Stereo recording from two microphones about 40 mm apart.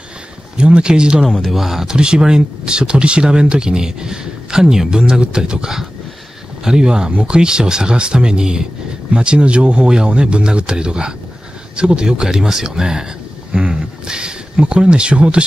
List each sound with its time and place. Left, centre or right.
0.6 s speech: right
1.4 s speech: centre
1.9 s speech: right